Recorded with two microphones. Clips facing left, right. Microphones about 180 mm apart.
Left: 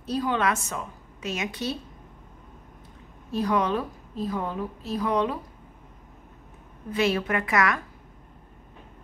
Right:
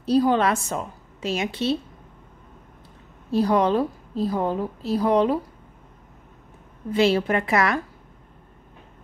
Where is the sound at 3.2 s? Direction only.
35° right (ahead or behind).